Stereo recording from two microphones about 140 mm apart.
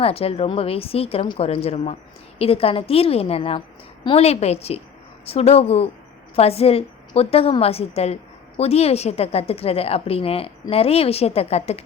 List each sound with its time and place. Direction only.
0.0 s a woman's voice: 45° left (ahead or behind)